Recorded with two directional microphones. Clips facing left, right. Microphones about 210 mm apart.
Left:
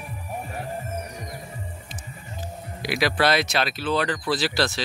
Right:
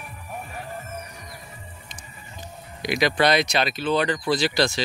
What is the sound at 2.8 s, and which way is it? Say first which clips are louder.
Speech: right 1 dB; 5° left (ahead or behind).